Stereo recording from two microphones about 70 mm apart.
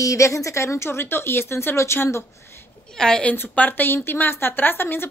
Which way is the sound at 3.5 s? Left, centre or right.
Left.